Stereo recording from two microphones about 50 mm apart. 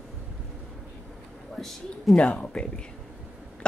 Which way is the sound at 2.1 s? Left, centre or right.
Left.